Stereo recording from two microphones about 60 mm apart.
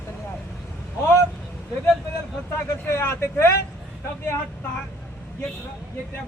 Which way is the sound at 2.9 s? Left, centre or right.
Left.